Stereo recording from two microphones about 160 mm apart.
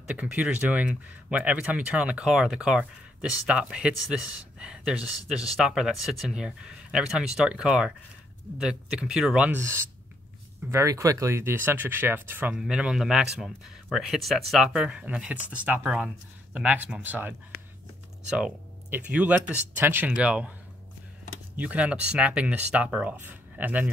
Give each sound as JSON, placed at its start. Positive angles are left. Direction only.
{"t": 0.0, "sound": "speech", "side_deg": -10}
{"t": 9.6, "sound": "speech", "side_deg": -15}
{"t": 18.4, "sound": "speech", "side_deg": -10}
{"t": 21.5, "sound": "speech", "side_deg": -10}